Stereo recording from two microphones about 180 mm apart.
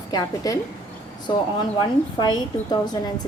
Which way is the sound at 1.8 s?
25° left (ahead or behind).